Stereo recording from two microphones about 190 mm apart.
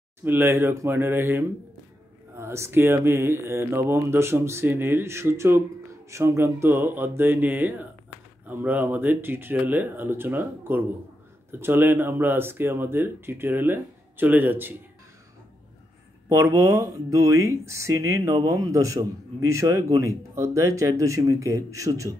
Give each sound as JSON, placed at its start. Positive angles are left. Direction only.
{"t": 0.2, "sound": "speech", "side_deg": -10}
{"t": 16.3, "sound": "speech", "side_deg": -15}